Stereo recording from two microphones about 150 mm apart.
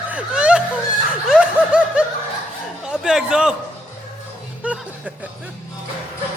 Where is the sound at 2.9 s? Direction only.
5° right (ahead or behind).